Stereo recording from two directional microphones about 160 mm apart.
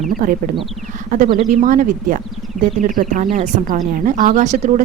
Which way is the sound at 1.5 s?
55° right (ahead or behind).